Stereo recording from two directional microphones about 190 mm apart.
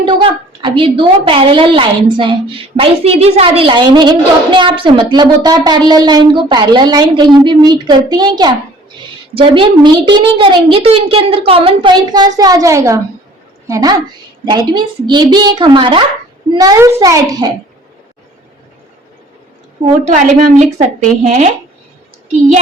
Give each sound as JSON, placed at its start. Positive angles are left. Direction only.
{"t": 0.0, "sound": "a woman's voice", "side_deg": -25}
{"t": 20.1, "sound": "speech", "side_deg": -40}